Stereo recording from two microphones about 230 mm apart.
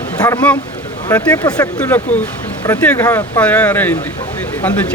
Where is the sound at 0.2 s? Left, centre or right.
Centre.